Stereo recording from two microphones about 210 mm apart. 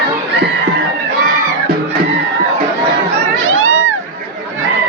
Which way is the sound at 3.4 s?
70° right (ahead or behind).